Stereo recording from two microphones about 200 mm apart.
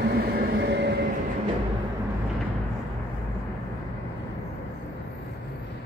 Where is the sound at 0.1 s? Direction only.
50° right (ahead or behind).